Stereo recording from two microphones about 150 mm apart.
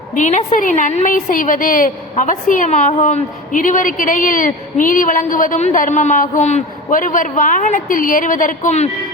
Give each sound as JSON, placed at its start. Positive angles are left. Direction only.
{"t": 0.2, "sound": "a woman's voice", "side_deg": 55}